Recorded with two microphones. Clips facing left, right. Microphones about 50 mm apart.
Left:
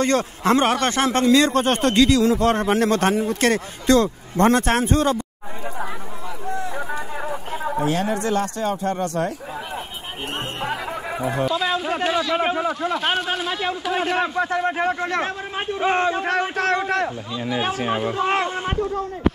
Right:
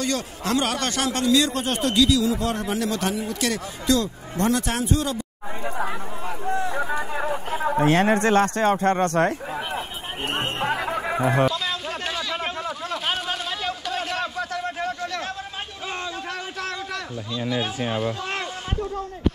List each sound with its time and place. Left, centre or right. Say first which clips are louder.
0.0 s a man's voice: left 7 dB; left
6.6 s a sound: right 2 dB; right
10.2 s music: right 2 dB; right
11.5 s a man's voice: left 6 dB; centre; by 17.1 s left
17.5 s speech: left 4 dB; left